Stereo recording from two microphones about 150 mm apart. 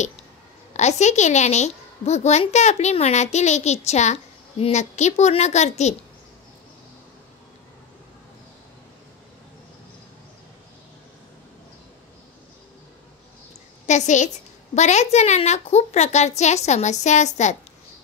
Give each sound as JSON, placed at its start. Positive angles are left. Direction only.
{"t": 0.7, "sound": "a woman's voice", "side_deg": 50}
{"t": 13.8, "sound": "a woman's voice", "side_deg": 50}